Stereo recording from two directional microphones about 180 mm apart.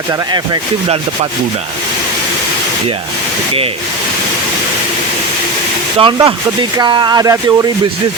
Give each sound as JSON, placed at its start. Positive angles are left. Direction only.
{"t": 6.0, "sound": "speech", "side_deg": -30}